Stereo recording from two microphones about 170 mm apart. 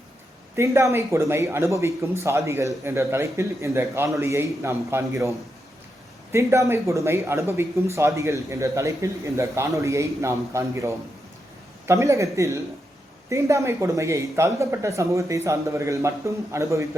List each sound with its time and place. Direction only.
0.5 s speech: 15° right (ahead or behind)
6.3 s speech: 15° right (ahead or behind)